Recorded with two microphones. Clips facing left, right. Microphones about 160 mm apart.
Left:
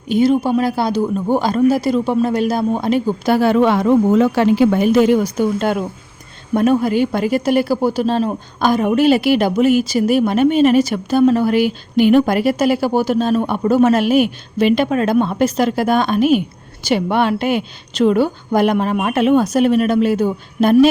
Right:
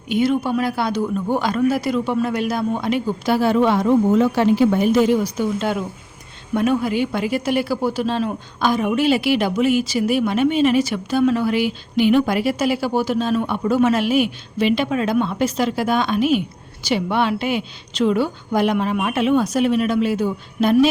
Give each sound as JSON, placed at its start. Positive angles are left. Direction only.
{"t": 0.1, "sound": "speech", "side_deg": 35}
{"t": 3.3, "sound": "a woman's voice", "side_deg": 65}